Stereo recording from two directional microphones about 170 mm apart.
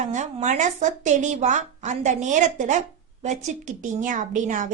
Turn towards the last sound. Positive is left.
turn(degrees=-50)  # may be behind; listen again after turning